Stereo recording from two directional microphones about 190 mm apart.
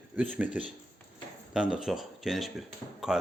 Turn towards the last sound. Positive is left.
turn(degrees=-5)  # may be behind; listen again after turning